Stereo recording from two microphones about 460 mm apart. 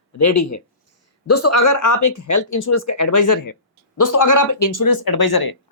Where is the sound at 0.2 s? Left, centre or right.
Left.